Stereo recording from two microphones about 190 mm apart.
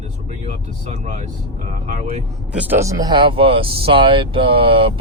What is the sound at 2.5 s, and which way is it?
Speech, 10° right (ahead or behind).